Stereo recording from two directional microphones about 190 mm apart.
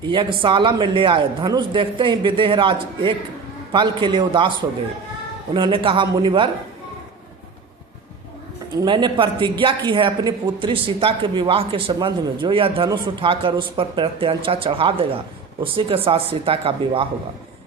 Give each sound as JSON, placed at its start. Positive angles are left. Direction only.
{"t": 0.1, "sound": "speech", "side_deg": -25}
{"t": 5.5, "sound": "speech", "side_deg": -25}
{"t": 8.7, "sound": "speech", "side_deg": -20}